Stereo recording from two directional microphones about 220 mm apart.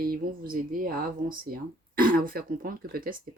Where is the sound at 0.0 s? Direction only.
40° right (ahead or behind).